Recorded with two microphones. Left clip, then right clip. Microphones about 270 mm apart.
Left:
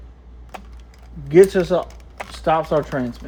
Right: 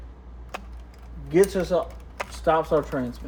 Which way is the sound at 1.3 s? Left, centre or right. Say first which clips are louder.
Left 7 dB; left.